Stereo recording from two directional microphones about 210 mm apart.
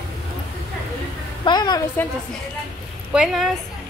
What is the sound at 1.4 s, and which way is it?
Speech, 20° left (ahead or behind).